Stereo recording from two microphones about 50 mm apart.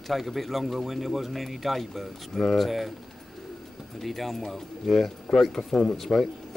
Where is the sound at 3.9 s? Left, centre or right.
Centre.